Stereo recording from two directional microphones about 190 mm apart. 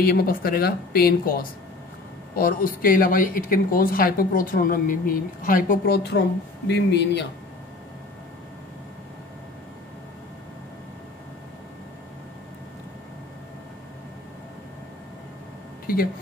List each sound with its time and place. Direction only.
0.0 s a woman's voice: 50° left (ahead or behind)